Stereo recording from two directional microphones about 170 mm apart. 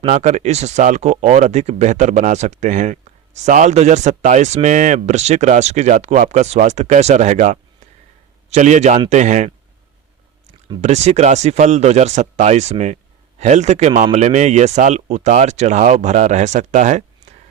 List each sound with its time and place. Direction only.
0.0 s speech: 40° right (ahead or behind)
10.8 s speech: 40° right (ahead or behind)